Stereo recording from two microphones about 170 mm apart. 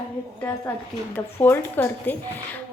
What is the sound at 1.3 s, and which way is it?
Speech, 15° left (ahead or behind).